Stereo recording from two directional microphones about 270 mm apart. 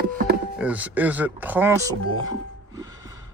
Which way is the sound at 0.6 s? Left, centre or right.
Centre.